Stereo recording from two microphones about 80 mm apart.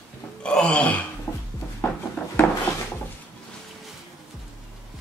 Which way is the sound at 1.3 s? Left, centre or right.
Left.